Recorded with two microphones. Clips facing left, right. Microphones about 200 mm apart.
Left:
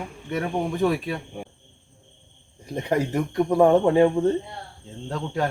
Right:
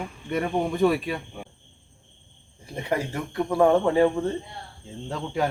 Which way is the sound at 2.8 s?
20° left (ahead or behind).